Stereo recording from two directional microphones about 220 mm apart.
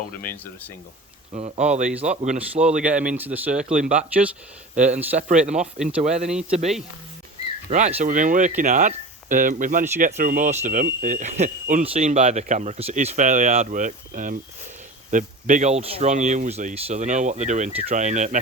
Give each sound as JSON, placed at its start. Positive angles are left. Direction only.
{"t": 0.2, "sound": "speech", "side_deg": 10}
{"t": 1.3, "sound": "speech", "side_deg": -30}
{"t": 2.8, "sound": "speech", "side_deg": -5}
{"t": 3.8, "sound": "speech", "side_deg": -35}